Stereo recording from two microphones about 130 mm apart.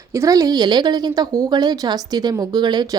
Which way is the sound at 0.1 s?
25° right (ahead or behind).